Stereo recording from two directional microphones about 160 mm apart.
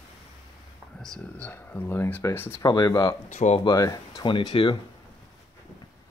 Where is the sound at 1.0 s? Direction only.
5° left (ahead or behind).